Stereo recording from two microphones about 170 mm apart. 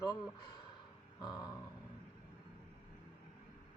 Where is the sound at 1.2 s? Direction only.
25° left (ahead or behind).